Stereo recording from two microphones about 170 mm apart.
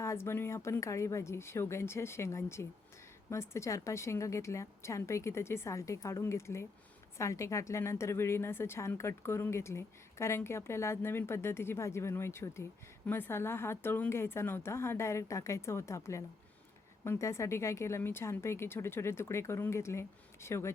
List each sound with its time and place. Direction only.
0.0 s a woman's voice: 15° left (ahead or behind)